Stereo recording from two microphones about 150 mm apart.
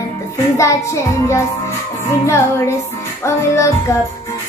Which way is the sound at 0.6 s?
20° left (ahead or behind).